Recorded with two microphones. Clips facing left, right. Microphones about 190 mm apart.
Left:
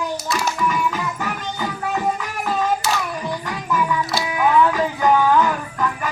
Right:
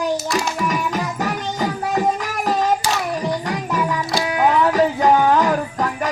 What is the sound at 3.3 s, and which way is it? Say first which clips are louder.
Music: right 2 dB; 35° right (ahead or behind).